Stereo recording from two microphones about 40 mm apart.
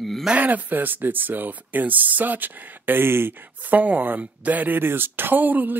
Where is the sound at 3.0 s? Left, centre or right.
Right.